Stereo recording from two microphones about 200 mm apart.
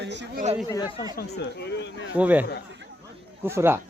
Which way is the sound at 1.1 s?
55° left (ahead or behind).